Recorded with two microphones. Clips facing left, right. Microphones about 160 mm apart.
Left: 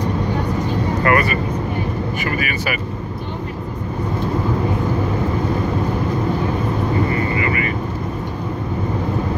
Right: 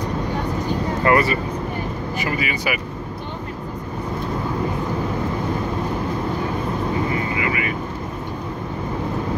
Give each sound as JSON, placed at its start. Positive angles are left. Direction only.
{"t": 1.0, "sound": "speech", "side_deg": -25}
{"t": 7.1, "sound": "vehicle", "side_deg": -5}